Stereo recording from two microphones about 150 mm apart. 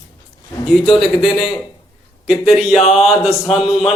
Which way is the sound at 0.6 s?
Centre (ahead or behind).